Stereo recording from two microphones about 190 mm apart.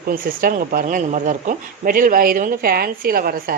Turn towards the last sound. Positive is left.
turn(degrees=-50)  # may be behind; listen again after turning